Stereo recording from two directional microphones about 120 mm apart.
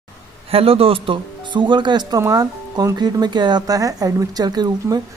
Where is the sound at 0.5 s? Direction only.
55° right (ahead or behind).